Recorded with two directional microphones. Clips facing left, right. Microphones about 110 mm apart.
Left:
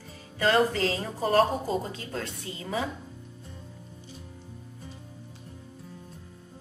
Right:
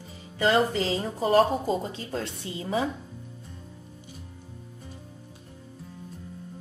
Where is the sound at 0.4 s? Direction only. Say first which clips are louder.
Even; 15° right (ahead or behind).